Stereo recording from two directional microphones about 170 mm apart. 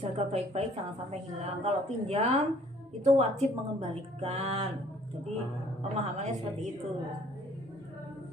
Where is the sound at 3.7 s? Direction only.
35° right (ahead or behind).